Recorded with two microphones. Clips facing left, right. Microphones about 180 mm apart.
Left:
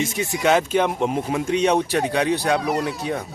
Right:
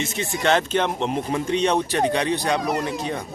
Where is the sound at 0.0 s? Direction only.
10° left (ahead or behind).